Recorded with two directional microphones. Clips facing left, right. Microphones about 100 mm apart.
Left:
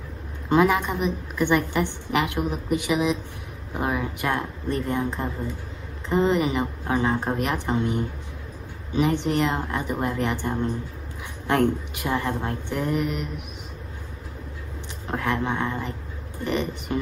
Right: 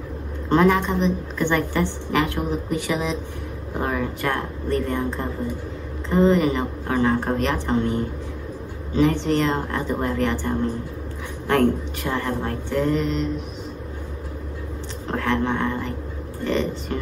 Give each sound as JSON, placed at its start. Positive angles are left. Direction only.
{"t": 0.5, "sound": "a woman's voice", "side_deg": 10}
{"t": 15.0, "sound": "a woman's voice", "side_deg": 15}